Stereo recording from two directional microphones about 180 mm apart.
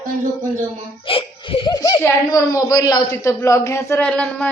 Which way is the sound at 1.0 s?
30° left (ahead or behind).